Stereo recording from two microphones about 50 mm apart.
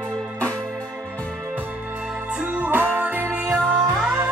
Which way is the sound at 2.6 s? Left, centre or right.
Right.